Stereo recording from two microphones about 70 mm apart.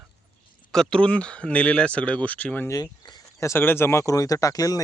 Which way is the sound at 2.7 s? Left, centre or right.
Left.